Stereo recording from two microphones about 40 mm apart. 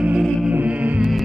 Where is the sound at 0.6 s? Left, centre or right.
Right.